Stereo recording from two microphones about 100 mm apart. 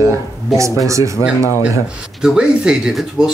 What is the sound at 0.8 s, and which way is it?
Speech, 30° right (ahead or behind).